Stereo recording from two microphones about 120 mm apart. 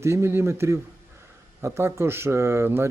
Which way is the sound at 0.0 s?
20° right (ahead or behind).